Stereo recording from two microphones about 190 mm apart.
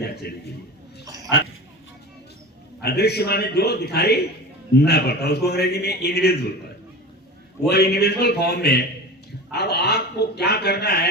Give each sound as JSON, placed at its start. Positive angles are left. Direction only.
{"t": 0.0, "sound": "speech", "side_deg": 60}
{"t": 2.8, "sound": "speech", "side_deg": 60}
{"t": 7.7, "sound": "speech", "side_deg": 60}